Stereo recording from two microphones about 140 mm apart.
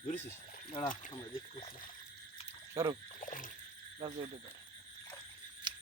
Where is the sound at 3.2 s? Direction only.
70° left (ahead or behind).